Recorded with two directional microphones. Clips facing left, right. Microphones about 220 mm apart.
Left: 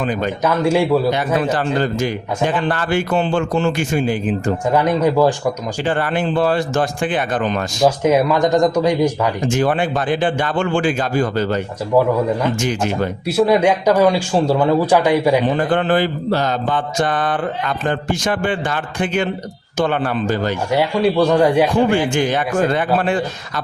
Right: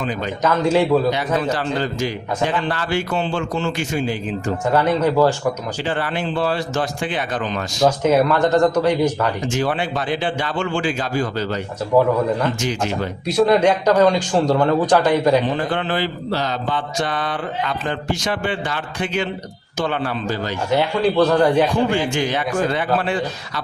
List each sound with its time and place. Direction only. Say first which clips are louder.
0.0 s mantra: left 4 dB; 50° left (ahead or behind)
0.4 s speech: even; 10° left (ahead or behind)
1.1 s mantra: left 3 dB; 50° left (ahead or behind)
4.7 s speech: left 1 dB; 15° left (ahead or behind)
5.8 s mantra: left 5 dB; 50° left (ahead or behind)
7.9 s speech: left 1 dB; 10° left (ahead or behind)
9.5 s mantra: left 4 dB; 50° left (ahead or behind)
13.2 s speech: even; 10° left (ahead or behind)
15.5 s mantra: left 6 dB; 50° left (ahead or behind)
20.7 s speech: left 1 dB; 10° left (ahead or behind)
22.1 s mantra: left 3 dB; 50° left (ahead or behind)